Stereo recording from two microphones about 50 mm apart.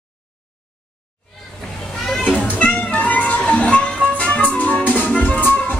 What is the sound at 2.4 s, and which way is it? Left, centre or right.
Music, left.